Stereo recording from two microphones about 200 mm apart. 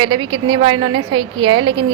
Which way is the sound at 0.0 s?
25° right (ahead or behind).